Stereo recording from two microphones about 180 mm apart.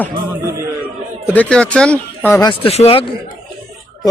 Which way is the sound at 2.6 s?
35° left (ahead or behind).